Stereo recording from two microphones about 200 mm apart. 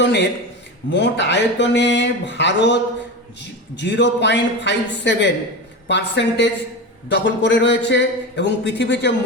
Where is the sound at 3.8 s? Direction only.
60° left (ahead or behind).